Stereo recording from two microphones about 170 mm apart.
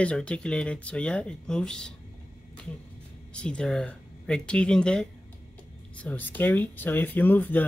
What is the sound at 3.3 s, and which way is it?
Speech, 5° left (ahead or behind).